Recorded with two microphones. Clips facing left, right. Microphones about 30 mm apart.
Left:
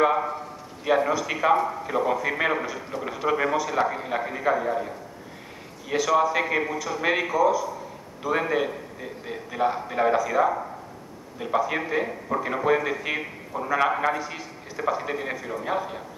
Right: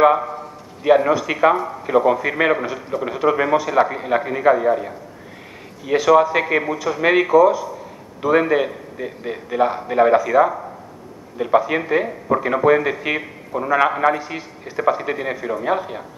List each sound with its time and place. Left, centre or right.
0.8 s speech: centre